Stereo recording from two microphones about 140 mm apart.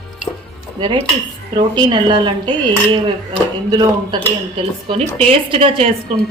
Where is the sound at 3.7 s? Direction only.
25° right (ahead or behind).